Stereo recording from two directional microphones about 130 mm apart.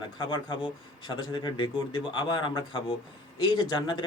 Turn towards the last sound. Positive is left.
turn(degrees=40)  # may be behind; listen again after turning